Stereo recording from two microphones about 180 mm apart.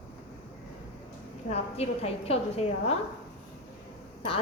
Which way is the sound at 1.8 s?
35° left (ahead or behind).